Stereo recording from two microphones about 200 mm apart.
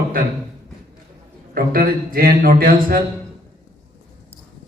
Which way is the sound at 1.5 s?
45° right (ahead or behind).